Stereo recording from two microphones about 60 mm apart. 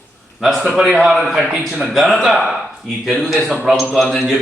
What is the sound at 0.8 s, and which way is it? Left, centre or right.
A man's voice, centre.